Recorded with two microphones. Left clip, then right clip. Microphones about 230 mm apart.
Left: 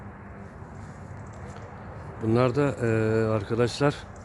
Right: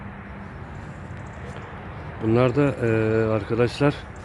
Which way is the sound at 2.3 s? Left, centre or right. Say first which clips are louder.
Right 3 dB; centre.